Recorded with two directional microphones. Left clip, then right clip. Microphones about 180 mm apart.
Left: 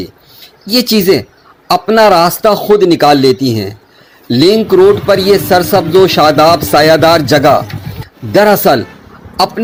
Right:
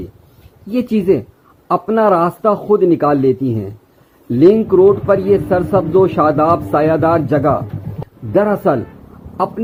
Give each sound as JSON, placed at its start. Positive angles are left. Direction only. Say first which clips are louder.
{"t": 0.7, "sound": "a man's voice", "louder": "left 6 dB", "side_deg": 20}